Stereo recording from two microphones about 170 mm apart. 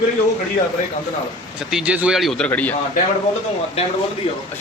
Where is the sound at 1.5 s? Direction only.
5° right (ahead or behind).